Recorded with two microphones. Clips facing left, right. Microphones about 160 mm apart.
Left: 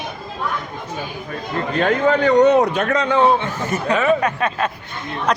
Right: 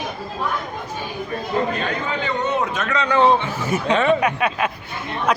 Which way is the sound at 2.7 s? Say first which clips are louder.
Left 5 dB; 60° left (ahead or behind).